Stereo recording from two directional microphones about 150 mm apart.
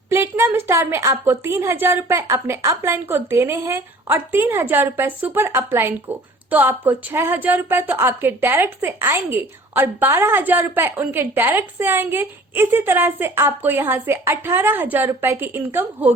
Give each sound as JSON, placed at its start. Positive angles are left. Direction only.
{"t": 0.1, "sound": "a woman's voice", "side_deg": -15}